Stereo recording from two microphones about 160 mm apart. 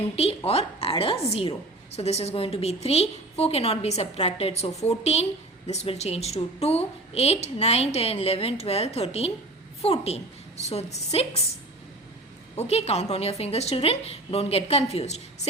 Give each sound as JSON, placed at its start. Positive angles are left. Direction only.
{"t": 0.2, "sound": "a woman's voice", "side_deg": 40}
{"t": 12.5, "sound": "a woman's voice", "side_deg": 40}